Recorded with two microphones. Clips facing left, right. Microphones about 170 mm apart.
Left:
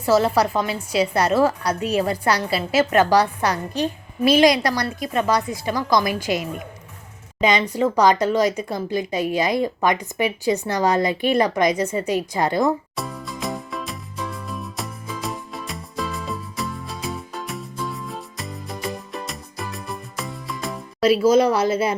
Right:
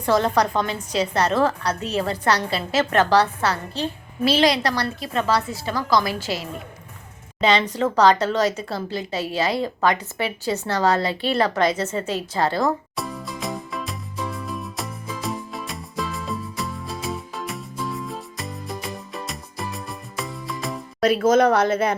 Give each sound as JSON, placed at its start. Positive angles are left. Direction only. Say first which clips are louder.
{"t": 0.0, "sound": "a woman's voice", "louder": "left 2 dB", "side_deg": 5}
{"t": 13.0, "sound": "music", "louder": "even", "side_deg": 0}
{"t": 21.2, "sound": "speech", "louder": "right 1 dB", "side_deg": -50}